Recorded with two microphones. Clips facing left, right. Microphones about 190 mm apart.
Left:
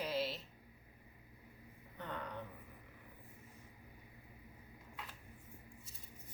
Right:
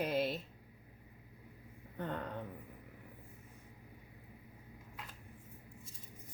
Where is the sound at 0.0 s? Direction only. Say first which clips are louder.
Right 5 dB; 55° right (ahead or behind).